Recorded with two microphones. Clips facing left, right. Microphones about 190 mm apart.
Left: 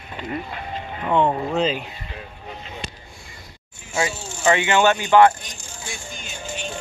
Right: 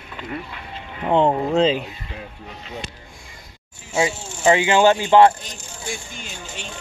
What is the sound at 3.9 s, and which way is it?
Speech, 20° right (ahead or behind).